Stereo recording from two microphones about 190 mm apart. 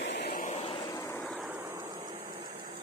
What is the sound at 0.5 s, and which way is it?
Vehicle, 30° left (ahead or behind).